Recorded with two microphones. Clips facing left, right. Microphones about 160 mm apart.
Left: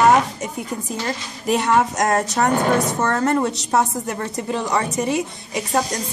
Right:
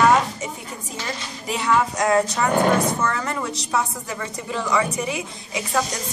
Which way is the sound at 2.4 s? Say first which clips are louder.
Left 1 dB; 50° left (ahead or behind).